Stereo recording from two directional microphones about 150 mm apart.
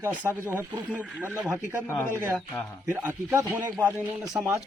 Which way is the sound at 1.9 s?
15° left (ahead or behind).